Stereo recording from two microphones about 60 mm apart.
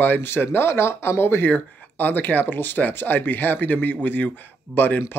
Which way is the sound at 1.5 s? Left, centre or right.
Left.